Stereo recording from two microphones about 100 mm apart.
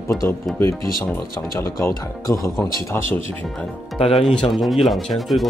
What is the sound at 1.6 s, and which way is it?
Speech, 30° left (ahead or behind).